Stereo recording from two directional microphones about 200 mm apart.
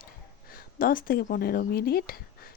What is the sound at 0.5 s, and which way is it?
A woman's voice, 45° left (ahead or behind).